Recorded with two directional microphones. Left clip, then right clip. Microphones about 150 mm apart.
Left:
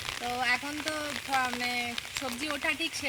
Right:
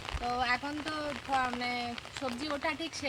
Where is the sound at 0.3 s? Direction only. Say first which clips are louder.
Left 2 dB; 15° left (ahead or behind).